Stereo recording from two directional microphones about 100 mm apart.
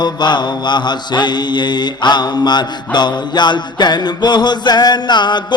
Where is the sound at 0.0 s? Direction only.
50° left (ahead or behind).